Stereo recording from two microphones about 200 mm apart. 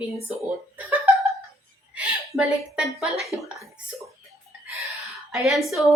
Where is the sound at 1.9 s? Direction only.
5° right (ahead or behind).